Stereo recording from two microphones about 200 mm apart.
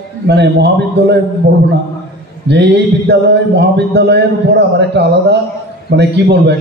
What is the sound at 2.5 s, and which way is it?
A man's voice, 60° right (ahead or behind).